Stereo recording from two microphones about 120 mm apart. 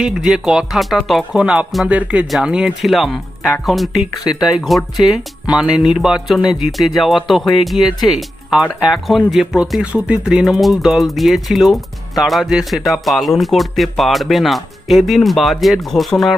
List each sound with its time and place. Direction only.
0.0 s speech: 5° right (ahead or behind)
4.2 s speech: 35° left (ahead or behind)
4.9 s speech: 5° right (ahead or behind)